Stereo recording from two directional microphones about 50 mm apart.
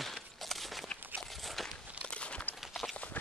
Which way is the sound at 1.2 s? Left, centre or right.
Centre.